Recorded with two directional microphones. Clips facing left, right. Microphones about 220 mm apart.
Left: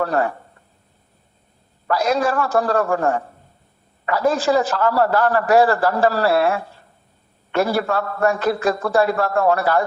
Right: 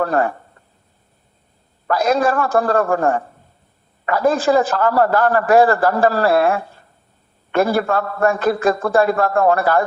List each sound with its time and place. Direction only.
0.0 s speech: 50° right (ahead or behind)
1.9 s a man's voice: 50° right (ahead or behind)